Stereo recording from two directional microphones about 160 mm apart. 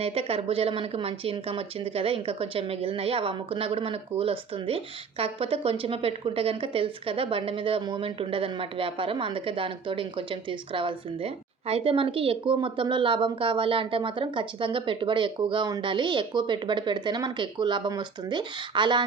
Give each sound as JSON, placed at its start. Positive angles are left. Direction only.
{"t": 0.0, "sound": "speech", "side_deg": -40}